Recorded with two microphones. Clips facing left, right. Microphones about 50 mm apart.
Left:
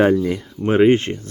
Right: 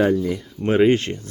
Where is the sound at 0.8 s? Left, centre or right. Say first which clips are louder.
Left 3 dB; left.